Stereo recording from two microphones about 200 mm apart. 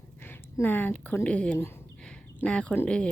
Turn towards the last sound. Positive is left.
turn(degrees=5)  # may be behind; listen again after turning